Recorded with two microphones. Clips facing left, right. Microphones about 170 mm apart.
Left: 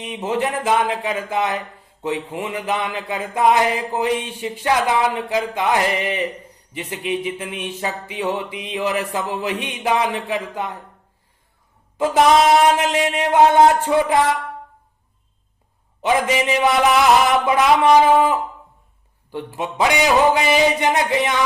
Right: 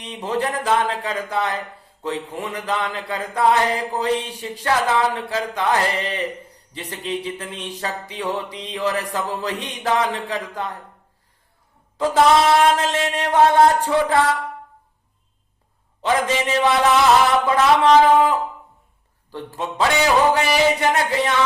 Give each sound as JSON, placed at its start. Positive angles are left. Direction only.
{"t": 0.0, "sound": "speech", "side_deg": 15}
{"t": 11.9, "sound": "speech", "side_deg": 15}
{"t": 16.0, "sound": "speech", "side_deg": 15}